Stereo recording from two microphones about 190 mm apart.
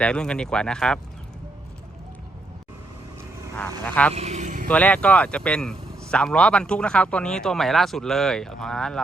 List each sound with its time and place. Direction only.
0.0 s speech: 5° left (ahead or behind)
3.5 s speech: 10° left (ahead or behind)
4.1 s a sound: 35° right (ahead or behind)
4.7 s speech: 5° left (ahead or behind)